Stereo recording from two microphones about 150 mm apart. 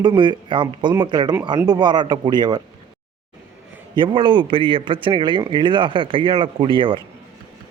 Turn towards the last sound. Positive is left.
turn(degrees=-35)  # may be behind; listen again after turning